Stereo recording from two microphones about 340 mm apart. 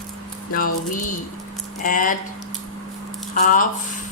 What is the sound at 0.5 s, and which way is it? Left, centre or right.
Speech, left.